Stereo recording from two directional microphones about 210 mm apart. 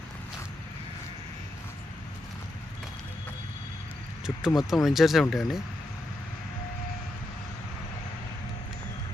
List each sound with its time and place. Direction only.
4.4 s speech: centre (ahead or behind)